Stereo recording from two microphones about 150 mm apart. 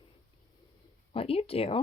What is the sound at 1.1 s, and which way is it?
Speech, 40° left (ahead or behind).